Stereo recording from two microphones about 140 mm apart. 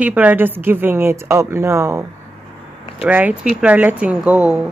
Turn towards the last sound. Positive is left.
turn(degrees=-10)  # may be behind; listen again after turning